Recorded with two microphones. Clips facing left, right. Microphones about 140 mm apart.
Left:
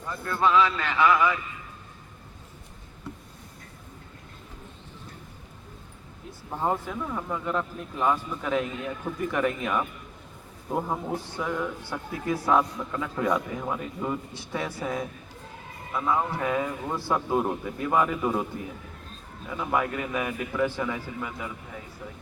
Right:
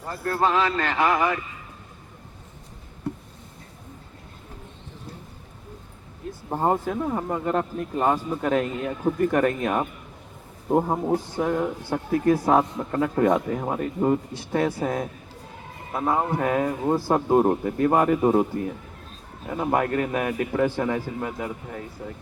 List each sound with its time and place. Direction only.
0.0 s a man's voice: 30° right (ahead or behind)
0.4 s speech: 45° right (ahead or behind)
6.5 s speech: 45° right (ahead or behind)
9.1 s a man's voice: 50° right (ahead or behind)
19.5 s speech: 50° right (ahead or behind)